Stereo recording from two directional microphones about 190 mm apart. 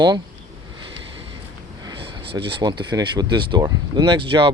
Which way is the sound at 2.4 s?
25° right (ahead or behind).